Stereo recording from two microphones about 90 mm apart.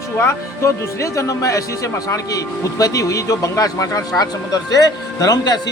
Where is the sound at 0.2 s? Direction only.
30° left (ahead or behind).